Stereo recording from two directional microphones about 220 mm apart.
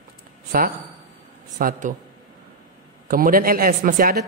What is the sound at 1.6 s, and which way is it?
Speech, 40° right (ahead or behind).